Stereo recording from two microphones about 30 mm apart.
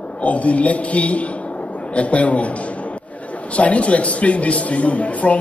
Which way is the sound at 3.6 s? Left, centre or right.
Left.